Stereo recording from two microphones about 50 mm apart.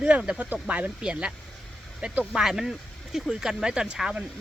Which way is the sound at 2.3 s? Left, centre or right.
Centre.